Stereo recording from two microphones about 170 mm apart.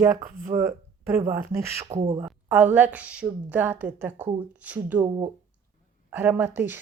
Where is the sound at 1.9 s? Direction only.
35° right (ahead or behind).